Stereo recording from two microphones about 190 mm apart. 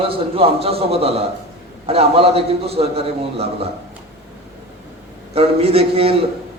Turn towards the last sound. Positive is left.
turn(degrees=-30)  # may be behind; listen again after turning